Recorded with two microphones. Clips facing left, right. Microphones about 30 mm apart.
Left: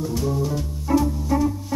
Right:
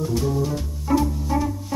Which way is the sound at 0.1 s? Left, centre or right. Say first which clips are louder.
Right 1 dB; centre.